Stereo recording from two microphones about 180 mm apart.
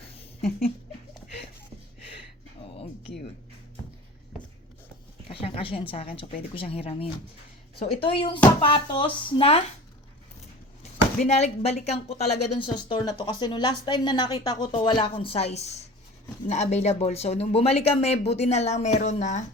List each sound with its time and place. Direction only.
0.1 s a sound: 35° left (ahead or behind)
5.3 s speech: 30° left (ahead or behind)
11.3 s speech: 35° left (ahead or behind)
12.7 s speech: 20° left (ahead or behind); by 19.5 s 40° left (ahead or behind)